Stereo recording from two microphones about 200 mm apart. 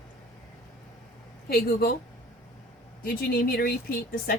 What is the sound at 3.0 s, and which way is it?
Speech, 50° left (ahead or behind).